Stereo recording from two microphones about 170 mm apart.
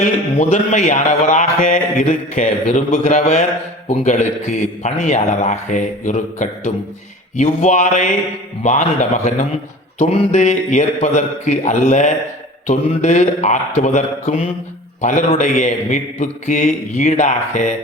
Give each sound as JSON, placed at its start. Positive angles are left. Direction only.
{"t": 0.3, "sound": "mantra", "side_deg": 45}